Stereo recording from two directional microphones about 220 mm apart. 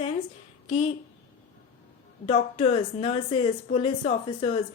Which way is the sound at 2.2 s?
25° left (ahead or behind).